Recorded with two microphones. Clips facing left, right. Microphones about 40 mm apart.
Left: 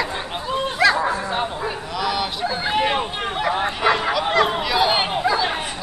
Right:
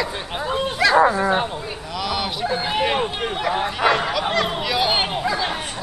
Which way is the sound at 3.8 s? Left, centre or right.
Centre.